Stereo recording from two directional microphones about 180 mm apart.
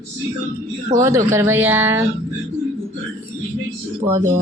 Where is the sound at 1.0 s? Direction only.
15° right (ahead or behind).